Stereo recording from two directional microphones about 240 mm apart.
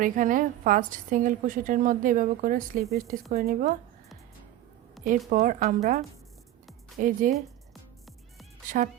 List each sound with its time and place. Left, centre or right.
0.0 s a woman's voice: right
5.3 s a woman's voice: right
7.0 s a woman's voice: right
8.7 s a woman's voice: right